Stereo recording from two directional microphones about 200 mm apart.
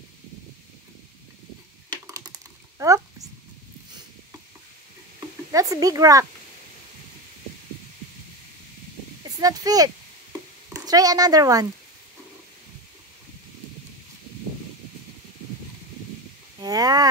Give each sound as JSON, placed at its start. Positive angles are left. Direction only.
{"t": 2.0, "sound": "typing", "side_deg": -15}
{"t": 2.8, "sound": "speech", "side_deg": -15}
{"t": 5.5, "sound": "speech", "side_deg": -15}
{"t": 9.4, "sound": "speech", "side_deg": -20}
{"t": 16.5, "sound": "speech", "side_deg": -20}